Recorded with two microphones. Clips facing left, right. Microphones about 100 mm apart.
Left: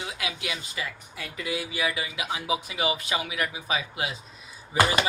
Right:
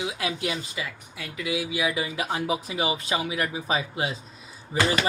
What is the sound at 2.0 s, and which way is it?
Speech, 40° right (ahead or behind).